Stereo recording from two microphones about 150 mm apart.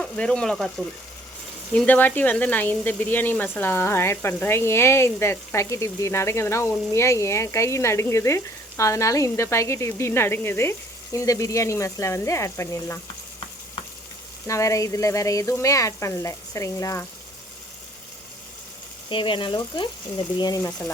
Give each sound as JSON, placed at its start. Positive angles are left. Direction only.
{"t": 0.0, "sound": "speech", "side_deg": 5}
{"t": 14.4, "sound": "speech", "side_deg": 20}
{"t": 19.0, "sound": "speech", "side_deg": 35}
{"t": 20.6, "sound": "speech", "side_deg": 15}